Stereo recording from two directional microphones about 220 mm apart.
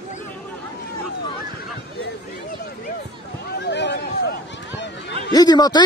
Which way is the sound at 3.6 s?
50° left (ahead or behind).